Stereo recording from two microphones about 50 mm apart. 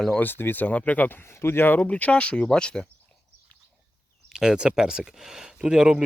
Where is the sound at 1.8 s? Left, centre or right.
Left.